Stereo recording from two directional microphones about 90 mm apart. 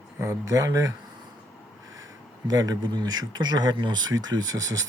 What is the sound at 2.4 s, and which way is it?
Speech, 45° right (ahead or behind).